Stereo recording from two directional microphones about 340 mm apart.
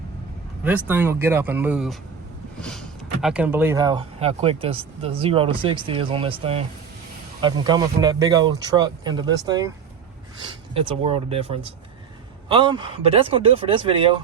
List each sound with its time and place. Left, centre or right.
0.9 s speech: centre